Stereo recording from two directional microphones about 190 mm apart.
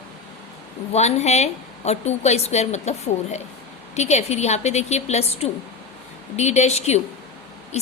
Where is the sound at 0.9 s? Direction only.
35° left (ahead or behind).